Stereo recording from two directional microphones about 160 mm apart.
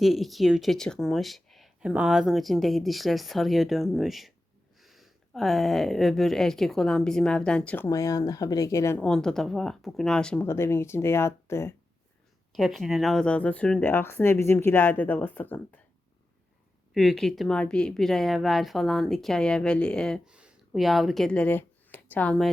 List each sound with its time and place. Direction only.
0.0 s speech: centre (ahead or behind)
7.9 s speech: 20° left (ahead or behind)
9.0 s speech: 5° left (ahead or behind)
12.5 s speech: centre (ahead or behind)
16.9 s speech: centre (ahead or behind)